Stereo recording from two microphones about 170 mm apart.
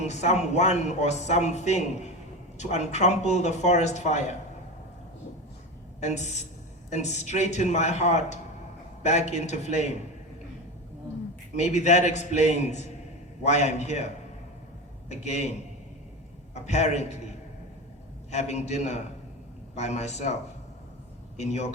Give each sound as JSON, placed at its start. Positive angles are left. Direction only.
{"t": 0.0, "sound": "a man's voice", "side_deg": 40}
{"t": 6.0, "sound": "a man's voice", "side_deg": 45}
{"t": 11.5, "sound": "a man's voice", "side_deg": 40}
{"t": 15.1, "sound": "speech", "side_deg": 40}
{"t": 16.6, "sound": "speech", "side_deg": 40}
{"t": 18.3, "sound": "a man's voice", "side_deg": 40}
{"t": 21.3, "sound": "a man's voice", "side_deg": 40}